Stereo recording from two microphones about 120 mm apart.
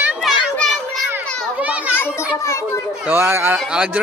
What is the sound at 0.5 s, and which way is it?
Children playing, centre (ahead or behind).